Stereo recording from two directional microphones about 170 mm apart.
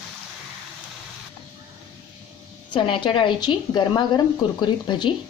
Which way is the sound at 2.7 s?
30° left (ahead or behind).